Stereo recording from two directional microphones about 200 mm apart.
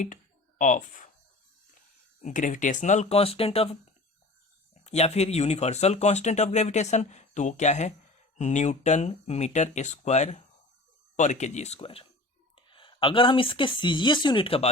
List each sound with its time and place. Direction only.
0.6 s speech: 40° left (ahead or behind)
2.2 s speech: 40° left (ahead or behind)